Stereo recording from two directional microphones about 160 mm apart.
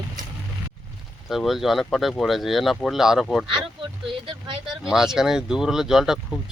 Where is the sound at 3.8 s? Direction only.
30° right (ahead or behind).